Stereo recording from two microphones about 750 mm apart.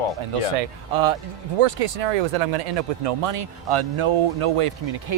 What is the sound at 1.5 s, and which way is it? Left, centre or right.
Speech, right.